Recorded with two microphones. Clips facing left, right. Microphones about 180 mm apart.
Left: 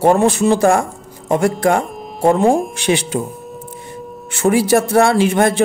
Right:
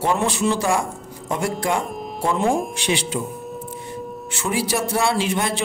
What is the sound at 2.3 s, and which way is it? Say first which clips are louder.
Speech: left 3 dB; 40° left (ahead or behind).